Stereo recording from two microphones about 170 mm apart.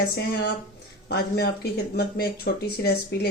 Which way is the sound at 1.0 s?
70° left (ahead or behind).